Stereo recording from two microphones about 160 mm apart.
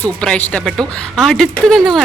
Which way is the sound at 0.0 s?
5° left (ahead or behind).